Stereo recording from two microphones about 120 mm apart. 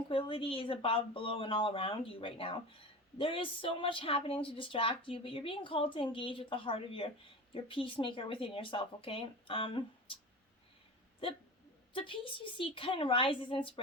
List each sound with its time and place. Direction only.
0.1 s a woman's voice: 45° left (ahead or behind)
11.9 s a woman's voice: 45° left (ahead or behind)